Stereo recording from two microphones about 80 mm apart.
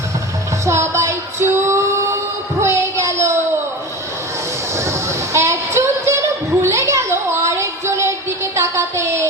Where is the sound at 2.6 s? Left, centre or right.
Right.